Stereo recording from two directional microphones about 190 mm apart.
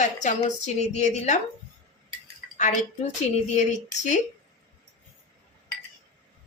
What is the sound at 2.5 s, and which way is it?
Speech, 40° left (ahead or behind).